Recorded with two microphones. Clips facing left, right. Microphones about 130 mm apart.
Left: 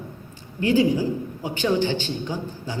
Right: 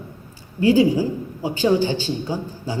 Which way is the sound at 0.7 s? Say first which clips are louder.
Right 3 dB; 15° right (ahead or behind).